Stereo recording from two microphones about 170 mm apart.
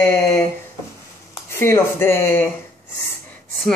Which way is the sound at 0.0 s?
15° left (ahead or behind).